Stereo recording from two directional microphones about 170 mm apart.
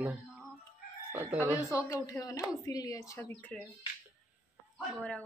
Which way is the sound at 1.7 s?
15° left (ahead or behind).